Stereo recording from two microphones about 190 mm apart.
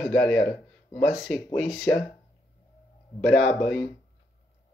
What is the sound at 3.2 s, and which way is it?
Speech, 5° left (ahead or behind).